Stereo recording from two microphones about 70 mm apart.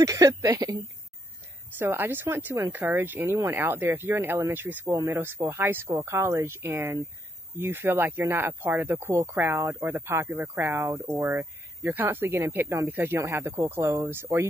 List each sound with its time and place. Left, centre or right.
0.0 s speech: right
1.8 s speech: right
9.8 s speech: right
11.9 s speech: right